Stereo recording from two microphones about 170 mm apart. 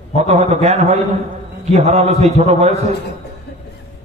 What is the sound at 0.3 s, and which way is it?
A man's voice, 40° right (ahead or behind).